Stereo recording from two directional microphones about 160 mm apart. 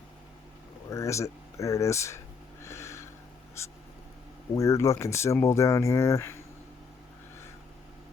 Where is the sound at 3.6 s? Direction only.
15° left (ahead or behind).